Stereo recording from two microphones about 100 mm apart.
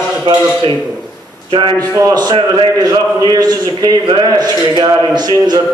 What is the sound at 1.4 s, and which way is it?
Speech, 55° right (ahead or behind).